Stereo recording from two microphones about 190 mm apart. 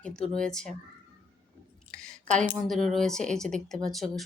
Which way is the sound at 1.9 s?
5° left (ahead or behind).